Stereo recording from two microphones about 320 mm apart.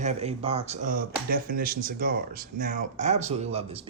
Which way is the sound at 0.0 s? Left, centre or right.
Centre.